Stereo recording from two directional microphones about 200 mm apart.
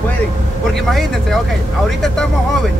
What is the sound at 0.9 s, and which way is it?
Speech, centre (ahead or behind).